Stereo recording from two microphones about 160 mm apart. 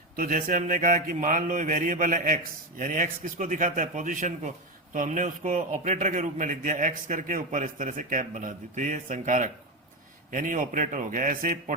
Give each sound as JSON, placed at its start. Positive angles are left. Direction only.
{"t": 0.2, "sound": "a man's voice", "side_deg": -60}